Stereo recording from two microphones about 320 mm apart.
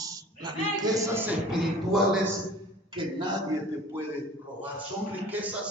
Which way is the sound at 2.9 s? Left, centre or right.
Centre.